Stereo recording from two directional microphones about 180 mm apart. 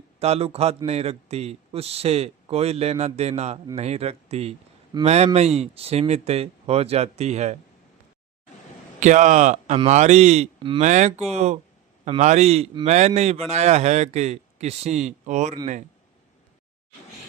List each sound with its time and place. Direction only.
0.2 s speech: 35° right (ahead or behind)
9.0 s speech: 40° right (ahead or behind)